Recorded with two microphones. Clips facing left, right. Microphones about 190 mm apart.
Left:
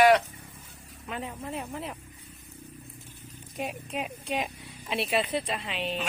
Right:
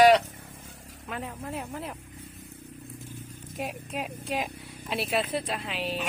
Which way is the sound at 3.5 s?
Centre (ahead or behind).